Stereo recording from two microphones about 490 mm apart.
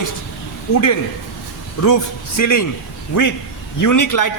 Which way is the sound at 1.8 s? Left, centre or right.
Left.